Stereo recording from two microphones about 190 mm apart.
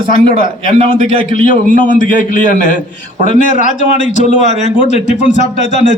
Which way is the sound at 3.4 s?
40° left (ahead or behind).